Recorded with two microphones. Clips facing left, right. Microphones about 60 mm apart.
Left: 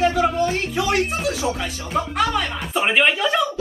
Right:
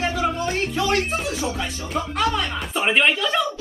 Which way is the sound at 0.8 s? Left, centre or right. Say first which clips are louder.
Left 2 dB; centre.